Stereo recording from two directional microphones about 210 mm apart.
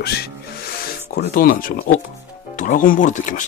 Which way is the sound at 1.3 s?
40° left (ahead or behind).